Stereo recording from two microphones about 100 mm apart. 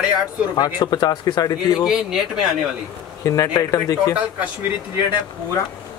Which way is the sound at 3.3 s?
35° left (ahead or behind).